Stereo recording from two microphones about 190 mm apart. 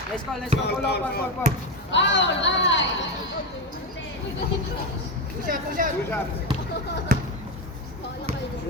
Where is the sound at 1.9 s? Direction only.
70° left (ahead or behind).